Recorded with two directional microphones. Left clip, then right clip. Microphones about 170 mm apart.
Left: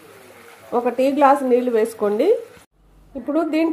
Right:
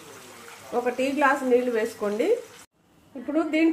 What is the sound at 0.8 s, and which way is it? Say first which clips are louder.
A woman's voice: left 8 dB; 65° left (ahead or behind).